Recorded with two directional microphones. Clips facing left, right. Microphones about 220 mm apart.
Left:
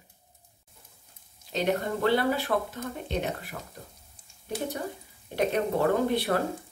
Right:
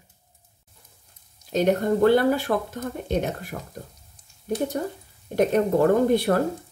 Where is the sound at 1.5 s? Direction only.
45° right (ahead or behind).